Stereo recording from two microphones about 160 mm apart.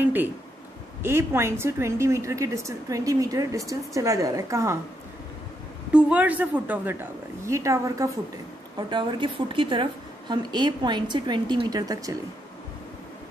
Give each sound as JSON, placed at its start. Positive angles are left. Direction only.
{"t": 0.0, "sound": "a sound", "side_deg": -10}
{"t": 1.0, "sound": "a woman's voice", "side_deg": -15}
{"t": 5.9, "sound": "a woman's voice", "side_deg": -5}
{"t": 8.7, "sound": "a woman's voice", "side_deg": -30}